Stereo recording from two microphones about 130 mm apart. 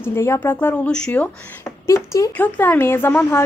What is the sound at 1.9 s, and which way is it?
Speech, 25° left (ahead or behind).